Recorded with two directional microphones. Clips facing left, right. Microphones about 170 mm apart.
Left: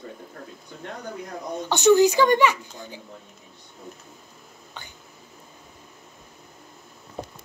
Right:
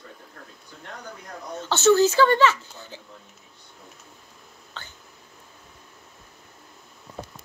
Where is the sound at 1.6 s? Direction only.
15° left (ahead or behind).